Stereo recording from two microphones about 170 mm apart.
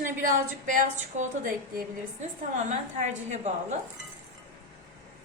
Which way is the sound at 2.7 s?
45° right (ahead or behind).